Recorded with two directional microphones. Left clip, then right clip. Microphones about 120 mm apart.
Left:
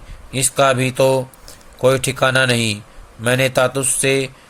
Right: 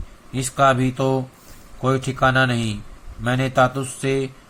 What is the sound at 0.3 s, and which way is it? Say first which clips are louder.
Speech: left 2 dB; 60° left (ahead or behind).